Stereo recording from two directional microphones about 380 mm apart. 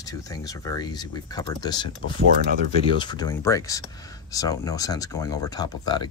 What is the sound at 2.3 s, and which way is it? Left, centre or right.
Speech, right.